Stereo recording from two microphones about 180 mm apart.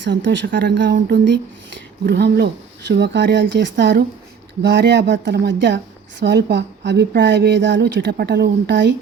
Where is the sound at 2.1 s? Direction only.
65° right (ahead or behind).